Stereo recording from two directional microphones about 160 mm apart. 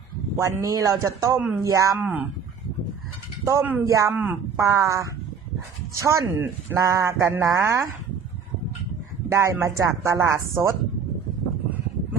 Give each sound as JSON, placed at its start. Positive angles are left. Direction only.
{"t": 0.6, "sound": "speech", "side_deg": -20}
{"t": 1.4, "sound": "speech", "side_deg": -10}
{"t": 1.7, "sound": "speech", "side_deg": -20}
{"t": 3.4, "sound": "speech", "side_deg": -15}
{"t": 9.3, "sound": "speech", "side_deg": -15}